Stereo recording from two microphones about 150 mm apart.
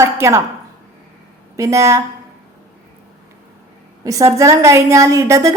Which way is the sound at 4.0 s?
20° right (ahead or behind).